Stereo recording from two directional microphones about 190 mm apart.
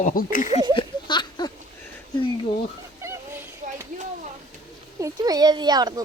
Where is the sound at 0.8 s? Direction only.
25° left (ahead or behind).